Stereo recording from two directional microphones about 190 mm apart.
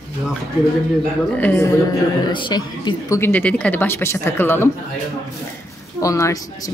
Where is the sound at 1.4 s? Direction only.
10° left (ahead or behind).